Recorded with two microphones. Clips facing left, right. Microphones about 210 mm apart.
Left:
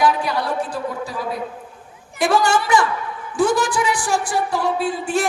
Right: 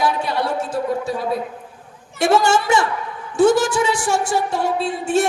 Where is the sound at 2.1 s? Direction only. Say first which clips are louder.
Right 2 dB; 25° right (ahead or behind).